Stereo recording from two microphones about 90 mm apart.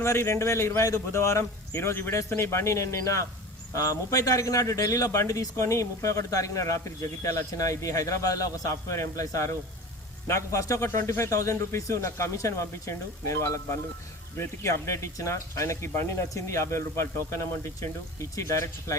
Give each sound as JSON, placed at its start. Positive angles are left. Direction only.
{"t": 0.0, "sound": "speech", "side_deg": 30}